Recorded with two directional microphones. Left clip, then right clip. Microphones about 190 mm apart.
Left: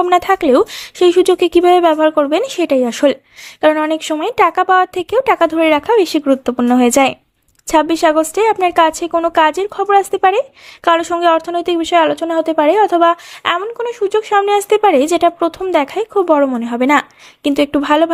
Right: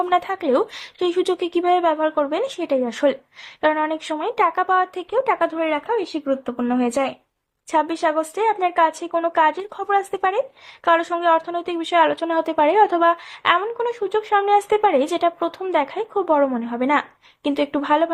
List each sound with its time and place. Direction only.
0.0 s a woman's voice: 35° left (ahead or behind)